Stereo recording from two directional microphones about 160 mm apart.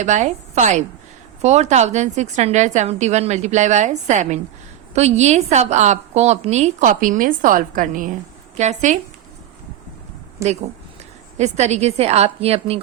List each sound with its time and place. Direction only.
0.0 s a woman's voice: 45° right (ahead or behind)
10.4 s speech: 20° right (ahead or behind)
11.3 s a woman's voice: 45° right (ahead or behind)